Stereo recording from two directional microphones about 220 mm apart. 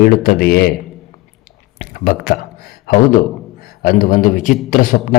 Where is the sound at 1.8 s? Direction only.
40° left (ahead or behind).